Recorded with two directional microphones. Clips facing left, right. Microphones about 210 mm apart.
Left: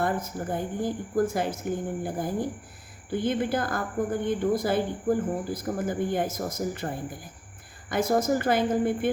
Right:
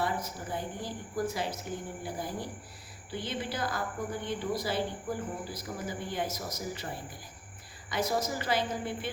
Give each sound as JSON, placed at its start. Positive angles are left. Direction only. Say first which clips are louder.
{"t": 0.0, "sound": "speech", "louder": "left 5 dB", "side_deg": 50}